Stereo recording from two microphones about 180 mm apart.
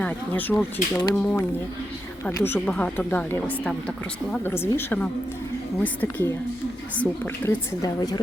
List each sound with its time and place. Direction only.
0.0 s a woman's voice: 10° left (ahead or behind)
7.8 s a woman's voice: 20° left (ahead or behind)